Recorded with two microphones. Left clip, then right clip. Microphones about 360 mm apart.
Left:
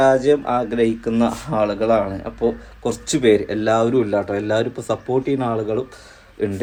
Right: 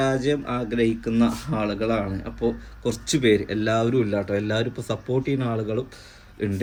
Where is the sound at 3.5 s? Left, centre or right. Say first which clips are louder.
Left 5 dB; centre.